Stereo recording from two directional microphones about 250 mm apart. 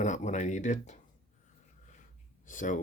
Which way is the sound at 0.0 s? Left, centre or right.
Left.